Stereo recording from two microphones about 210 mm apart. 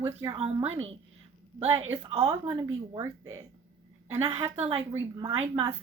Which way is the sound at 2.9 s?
15° right (ahead or behind).